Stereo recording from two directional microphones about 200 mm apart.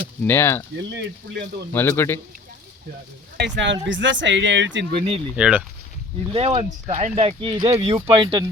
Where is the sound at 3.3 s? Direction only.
60° right (ahead or behind).